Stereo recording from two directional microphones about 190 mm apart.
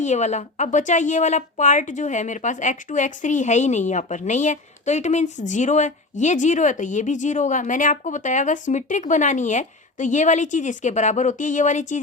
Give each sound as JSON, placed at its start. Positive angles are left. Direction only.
{"t": 0.0, "sound": "a woman's voice", "side_deg": 40}